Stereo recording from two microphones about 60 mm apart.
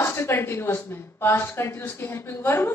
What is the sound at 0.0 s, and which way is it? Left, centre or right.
Speech, left.